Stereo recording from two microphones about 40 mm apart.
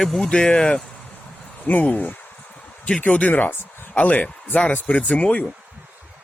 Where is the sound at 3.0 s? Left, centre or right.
Left.